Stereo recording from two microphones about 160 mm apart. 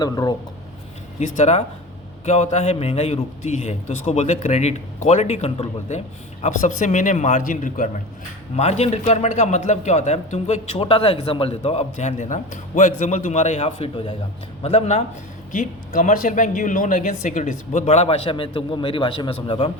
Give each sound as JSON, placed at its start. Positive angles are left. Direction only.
{"t": 0.0, "sound": "speech", "side_deg": 25}
{"t": 1.2, "sound": "a man's voice", "side_deg": 45}
{"t": 8.5, "sound": "a man's voice", "side_deg": 40}
{"t": 15.5, "sound": "a man's voice", "side_deg": 55}